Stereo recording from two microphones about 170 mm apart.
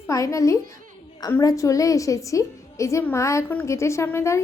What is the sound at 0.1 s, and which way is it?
A child's voice, 20° left (ahead or behind).